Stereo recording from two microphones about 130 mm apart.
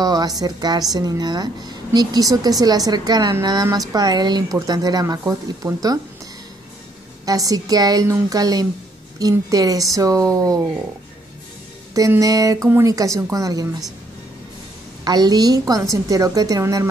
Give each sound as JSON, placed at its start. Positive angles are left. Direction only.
{"t": 0.0, "sound": "a woman's voice", "side_deg": -30}
{"t": 7.2, "sound": "speech", "side_deg": -30}
{"t": 11.9, "sound": "speech", "side_deg": -25}
{"t": 15.0, "sound": "speech", "side_deg": -30}